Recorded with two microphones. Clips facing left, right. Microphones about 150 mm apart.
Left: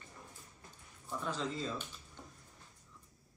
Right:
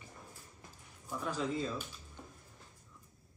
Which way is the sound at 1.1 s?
10° right (ahead or behind).